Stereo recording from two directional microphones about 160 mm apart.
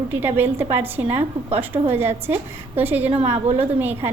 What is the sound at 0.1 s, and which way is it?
A woman's voice, 10° right (ahead or behind).